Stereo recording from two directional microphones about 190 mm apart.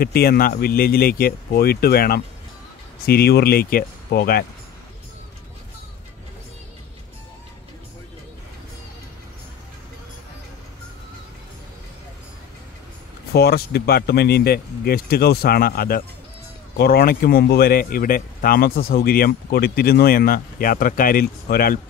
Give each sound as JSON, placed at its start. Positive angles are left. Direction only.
{"t": 0.0, "sound": "speech", "side_deg": 55}
{"t": 13.3, "sound": "speech", "side_deg": 55}